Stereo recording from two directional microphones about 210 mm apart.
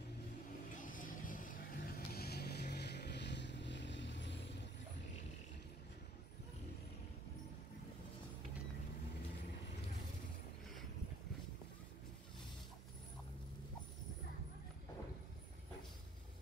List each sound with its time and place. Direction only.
0.7 s vehicle: 40° left (ahead or behind); by 4.4 s 60° left (ahead or behind)